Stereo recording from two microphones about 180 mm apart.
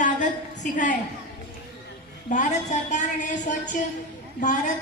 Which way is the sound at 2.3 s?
45° left (ahead or behind).